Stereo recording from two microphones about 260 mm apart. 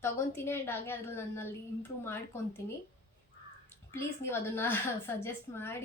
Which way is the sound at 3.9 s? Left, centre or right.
Centre.